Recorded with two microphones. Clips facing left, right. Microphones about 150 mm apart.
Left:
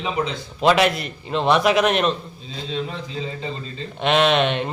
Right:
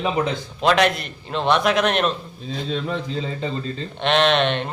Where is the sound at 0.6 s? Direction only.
Centre (ahead or behind).